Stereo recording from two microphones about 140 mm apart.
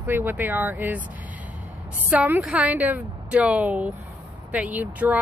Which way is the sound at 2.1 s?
15° right (ahead or behind).